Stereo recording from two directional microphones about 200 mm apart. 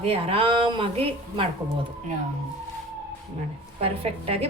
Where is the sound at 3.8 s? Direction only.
30° right (ahead or behind).